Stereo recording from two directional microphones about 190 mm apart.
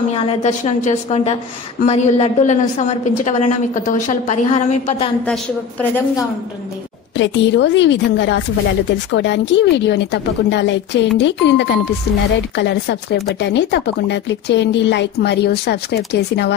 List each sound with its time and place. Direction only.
0.1 s a woman's voice: 35° left (ahead or behind)
5.2 s a woman's voice: 5° left (ahead or behind)
7.2 s a woman's voice: 70° left (ahead or behind)